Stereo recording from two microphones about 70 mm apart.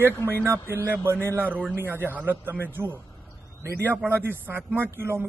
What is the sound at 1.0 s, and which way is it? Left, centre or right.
A man's voice, right.